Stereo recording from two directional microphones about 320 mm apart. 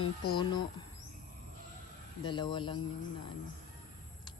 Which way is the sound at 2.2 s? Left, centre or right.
Centre.